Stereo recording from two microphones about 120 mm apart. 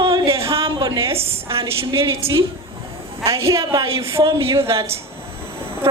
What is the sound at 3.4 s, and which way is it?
Speech, 25° right (ahead or behind).